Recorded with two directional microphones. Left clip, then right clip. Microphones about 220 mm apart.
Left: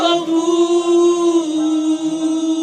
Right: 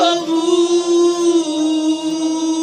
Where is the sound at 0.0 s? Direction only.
25° right (ahead or behind).